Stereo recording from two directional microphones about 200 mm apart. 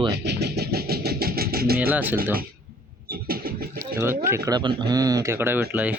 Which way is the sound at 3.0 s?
50° right (ahead or behind).